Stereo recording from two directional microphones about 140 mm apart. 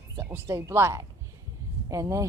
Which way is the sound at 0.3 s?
20° right (ahead or behind).